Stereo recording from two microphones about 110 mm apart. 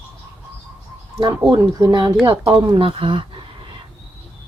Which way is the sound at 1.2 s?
35° right (ahead or behind).